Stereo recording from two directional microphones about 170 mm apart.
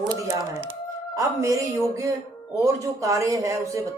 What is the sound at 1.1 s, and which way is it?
A woman's voice, 20° right (ahead or behind).